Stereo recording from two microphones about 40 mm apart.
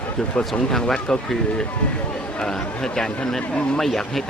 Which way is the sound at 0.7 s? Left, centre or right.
Centre.